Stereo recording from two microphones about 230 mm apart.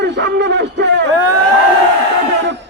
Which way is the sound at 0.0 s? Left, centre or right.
Right.